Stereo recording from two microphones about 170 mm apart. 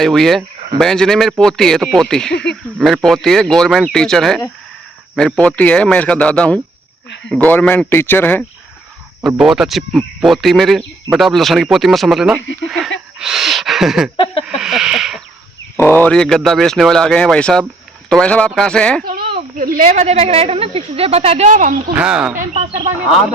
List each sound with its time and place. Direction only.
0.0 s speech: centre (ahead or behind)
2.3 s speech: 90° left
2.7 s speech: centre (ahead or behind)
9.2 s speech: centre (ahead or behind)
13.1 s a sound: 5° right (ahead or behind)
14.4 s speech: centre (ahead or behind)
15.8 s speech: 10° left (ahead or behind)
19.0 s a sound: 60° right (ahead or behind)
19.4 s a woman's voice: 55° right (ahead or behind)
21.9 s speech: 5° right (ahead or behind)